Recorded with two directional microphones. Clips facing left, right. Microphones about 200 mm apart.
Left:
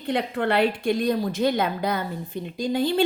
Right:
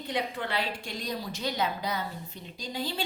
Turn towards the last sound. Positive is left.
turn(degrees=55)  # may be behind; listen again after turning